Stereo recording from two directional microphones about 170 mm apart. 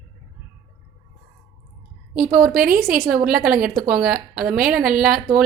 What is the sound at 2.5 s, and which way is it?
Speech, 55° right (ahead or behind).